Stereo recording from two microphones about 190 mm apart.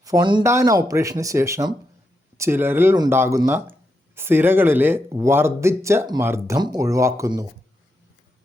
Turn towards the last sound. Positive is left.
turn(degrees=-15)  # may be behind; listen again after turning